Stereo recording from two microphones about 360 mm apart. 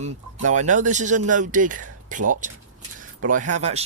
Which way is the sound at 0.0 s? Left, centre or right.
Centre.